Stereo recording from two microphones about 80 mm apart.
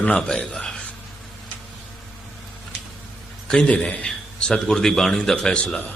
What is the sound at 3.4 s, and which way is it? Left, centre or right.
A man's voice, centre.